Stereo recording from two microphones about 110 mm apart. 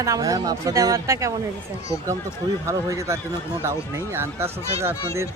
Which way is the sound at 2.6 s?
25° right (ahead or behind).